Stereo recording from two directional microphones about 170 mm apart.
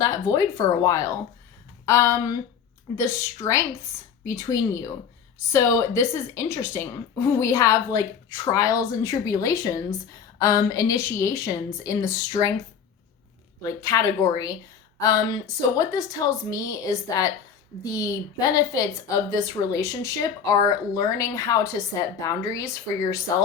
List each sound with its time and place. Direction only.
0.0 s a woman's voice: 20° left (ahead or behind)
13.6 s a woman's voice: 20° left (ahead or behind)
15.8 s a woman's voice: 20° left (ahead or behind)